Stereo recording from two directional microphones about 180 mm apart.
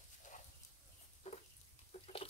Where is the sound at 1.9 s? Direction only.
35° left (ahead or behind).